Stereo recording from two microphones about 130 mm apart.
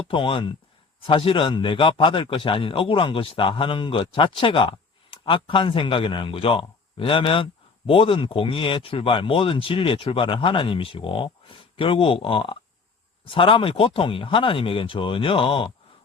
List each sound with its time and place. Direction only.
0.1 s a man's voice: 40° left (ahead or behind)